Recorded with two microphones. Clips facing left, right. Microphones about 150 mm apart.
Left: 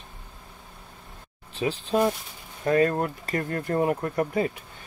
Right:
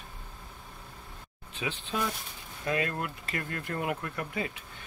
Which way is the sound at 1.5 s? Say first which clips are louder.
Left 9 dB; 40° left (ahead or behind).